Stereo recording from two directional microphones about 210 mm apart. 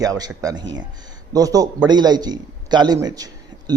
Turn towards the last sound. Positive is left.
turn(degrees=-15)  # may be behind; listen again after turning